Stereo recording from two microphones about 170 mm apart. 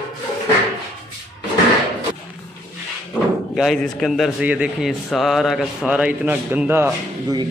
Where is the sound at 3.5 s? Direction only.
Centre (ahead or behind).